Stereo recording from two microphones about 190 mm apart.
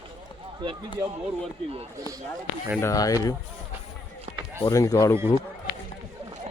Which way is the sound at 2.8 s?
20° left (ahead or behind).